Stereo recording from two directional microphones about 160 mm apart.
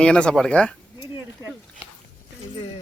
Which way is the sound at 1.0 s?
15° right (ahead or behind).